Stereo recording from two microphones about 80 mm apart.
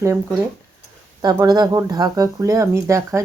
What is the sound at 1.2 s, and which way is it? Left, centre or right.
Speech, right.